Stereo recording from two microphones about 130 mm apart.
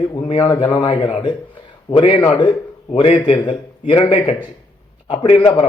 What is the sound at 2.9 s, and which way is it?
Speech, 50° left (ahead or behind).